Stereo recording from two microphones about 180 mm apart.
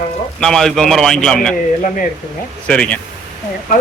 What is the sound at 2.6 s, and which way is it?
Speech, 5° left (ahead or behind).